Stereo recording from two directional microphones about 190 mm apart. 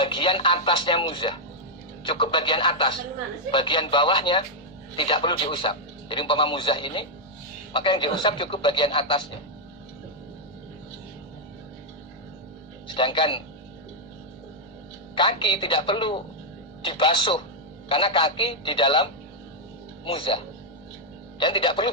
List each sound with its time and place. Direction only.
0.0 s a man's voice: 25° left (ahead or behind)
12.9 s a man's voice: 25° left (ahead or behind)
15.1 s a man's voice: 25° left (ahead or behind)
20.1 s a man's voice: 25° left (ahead or behind)